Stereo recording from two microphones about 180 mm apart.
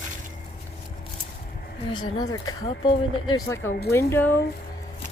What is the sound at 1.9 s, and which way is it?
Speech, 25° left (ahead or behind).